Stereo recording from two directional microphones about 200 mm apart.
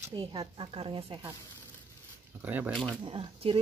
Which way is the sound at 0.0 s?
20° right (ahead or behind).